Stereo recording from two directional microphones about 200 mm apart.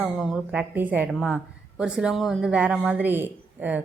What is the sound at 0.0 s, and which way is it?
A woman's voice, centre (ahead or behind).